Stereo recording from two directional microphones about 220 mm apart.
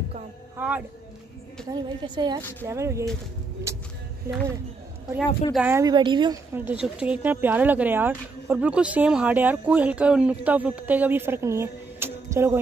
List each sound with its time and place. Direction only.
0.6 s speech: 5° right (ahead or behind)
1.7 s a woman's voice: 20° right (ahead or behind)
5.5 s speech: 5° right (ahead or behind)